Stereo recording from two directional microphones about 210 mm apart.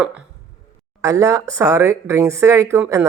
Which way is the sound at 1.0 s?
15° right (ahead or behind).